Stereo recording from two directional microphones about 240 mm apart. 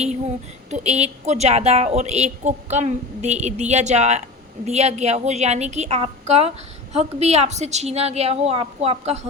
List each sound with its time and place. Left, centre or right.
0.7 s a woman's voice: right